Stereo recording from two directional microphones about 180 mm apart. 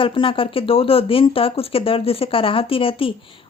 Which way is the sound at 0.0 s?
30° left (ahead or behind).